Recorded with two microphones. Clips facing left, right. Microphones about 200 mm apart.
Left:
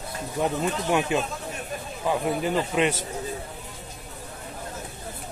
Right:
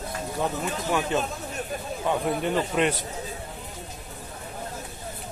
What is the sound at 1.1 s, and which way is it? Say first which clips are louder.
A man's voice: even; 10° left (ahead or behind).